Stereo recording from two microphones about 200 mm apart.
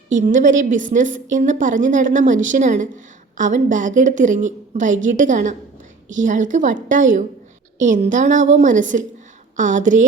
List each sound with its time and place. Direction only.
0.1 s a woman's voice: 40° right (ahead or behind)